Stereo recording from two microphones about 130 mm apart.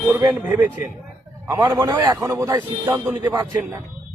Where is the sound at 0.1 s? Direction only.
20° right (ahead or behind).